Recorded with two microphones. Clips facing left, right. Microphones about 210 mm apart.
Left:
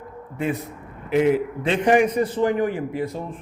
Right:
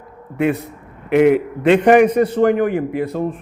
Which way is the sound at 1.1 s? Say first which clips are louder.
Right 6 dB; 65° right (ahead or behind).